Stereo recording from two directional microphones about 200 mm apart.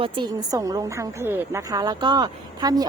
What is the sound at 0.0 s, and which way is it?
A woman's voice, 20° right (ahead or behind).